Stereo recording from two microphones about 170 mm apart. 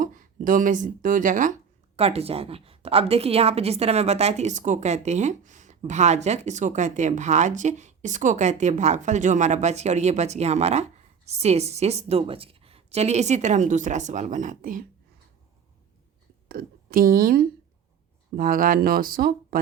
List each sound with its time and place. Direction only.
0.0 s speech: 50° right (ahead or behind)
2.0 s a woman's voice: 35° right (ahead or behind); by 14.8 s 55° right (ahead or behind)
16.5 s speech: 60° right (ahead or behind)